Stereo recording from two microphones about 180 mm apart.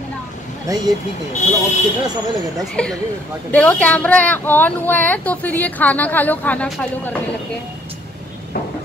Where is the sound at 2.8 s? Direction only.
5° left (ahead or behind).